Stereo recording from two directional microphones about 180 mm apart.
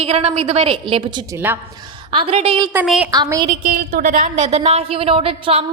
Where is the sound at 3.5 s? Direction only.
45° right (ahead or behind).